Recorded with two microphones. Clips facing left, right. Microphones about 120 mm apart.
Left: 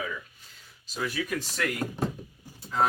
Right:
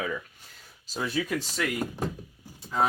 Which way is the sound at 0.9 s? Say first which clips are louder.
Right 2 dB; 30° right (ahead or behind).